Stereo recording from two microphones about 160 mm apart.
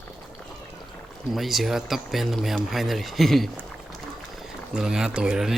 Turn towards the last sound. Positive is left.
turn(degrees=-5)  # may be behind; listen again after turning